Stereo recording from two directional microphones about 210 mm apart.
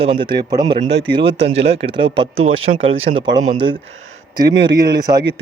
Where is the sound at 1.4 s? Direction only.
30° right (ahead or behind).